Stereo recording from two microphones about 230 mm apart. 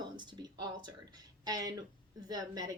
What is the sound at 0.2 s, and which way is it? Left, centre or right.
Speech, centre.